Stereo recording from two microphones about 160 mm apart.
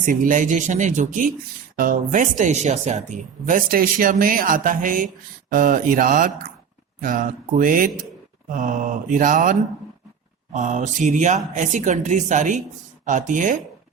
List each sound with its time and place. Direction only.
0.0 s speech: 55° right (ahead or behind)
3.4 s speech: 60° right (ahead or behind)